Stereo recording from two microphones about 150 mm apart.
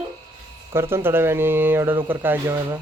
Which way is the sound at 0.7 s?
15° right (ahead or behind).